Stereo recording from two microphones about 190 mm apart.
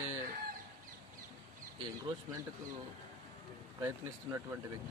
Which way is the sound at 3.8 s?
15° right (ahead or behind).